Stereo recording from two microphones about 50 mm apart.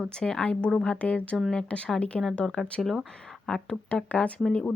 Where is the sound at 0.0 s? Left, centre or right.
Centre.